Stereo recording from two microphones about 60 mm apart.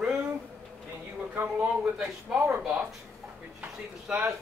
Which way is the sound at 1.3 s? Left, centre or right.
Right.